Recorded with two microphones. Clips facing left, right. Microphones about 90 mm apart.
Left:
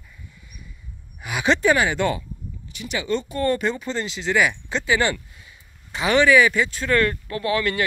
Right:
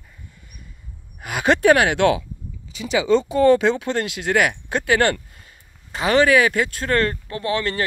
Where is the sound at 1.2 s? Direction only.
50° right (ahead or behind); by 2.2 s 70° right (ahead or behind).